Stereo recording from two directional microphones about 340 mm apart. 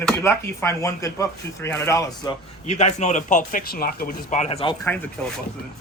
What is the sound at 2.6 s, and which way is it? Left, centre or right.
Speech, centre.